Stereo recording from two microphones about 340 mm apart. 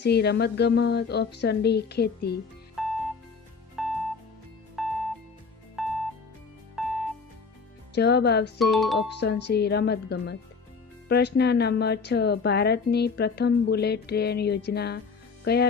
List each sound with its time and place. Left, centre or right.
0.0 s a woman's voice: left
2.8 s music: centre
7.9 s a woman's voice: left
8.5 s speech: centre
9.2 s a woman's voice: left